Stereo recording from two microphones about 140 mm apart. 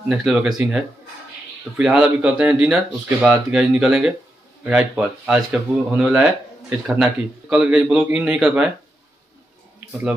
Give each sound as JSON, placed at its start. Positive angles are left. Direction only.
{"t": 0.1, "sound": "speech", "side_deg": -5}